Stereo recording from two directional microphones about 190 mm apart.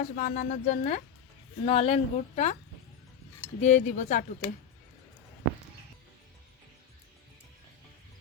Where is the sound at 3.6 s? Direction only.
40° left (ahead or behind).